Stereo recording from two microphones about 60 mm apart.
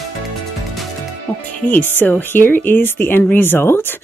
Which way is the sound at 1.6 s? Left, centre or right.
Left.